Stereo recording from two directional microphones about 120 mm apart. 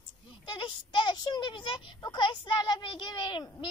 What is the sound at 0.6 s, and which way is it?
A child's voice, 45° left (ahead or behind).